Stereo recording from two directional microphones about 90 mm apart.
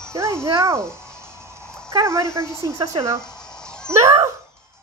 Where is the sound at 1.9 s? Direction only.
30° right (ahead or behind).